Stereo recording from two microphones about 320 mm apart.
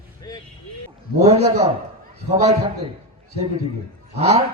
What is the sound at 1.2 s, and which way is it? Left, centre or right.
A man's voice, centre.